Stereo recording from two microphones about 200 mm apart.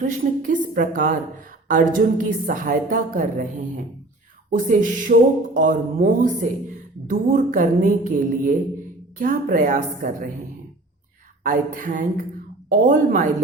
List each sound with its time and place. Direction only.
0.0 s a woman's voice: 40° right (ahead or behind)
4.5 s a woman's voice: 45° right (ahead or behind)
11.4 s a woman's voice: 40° right (ahead or behind)